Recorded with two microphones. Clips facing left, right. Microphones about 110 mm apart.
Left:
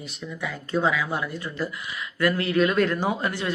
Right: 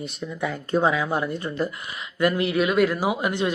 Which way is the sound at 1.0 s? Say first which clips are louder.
Right 3 dB; 35° right (ahead or behind).